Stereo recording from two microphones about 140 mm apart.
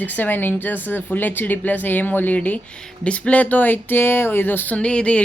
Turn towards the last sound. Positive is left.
turn(degrees=10)  # may be behind; listen again after turning